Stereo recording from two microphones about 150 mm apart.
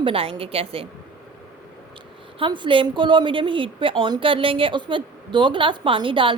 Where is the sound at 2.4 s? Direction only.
35° right (ahead or behind).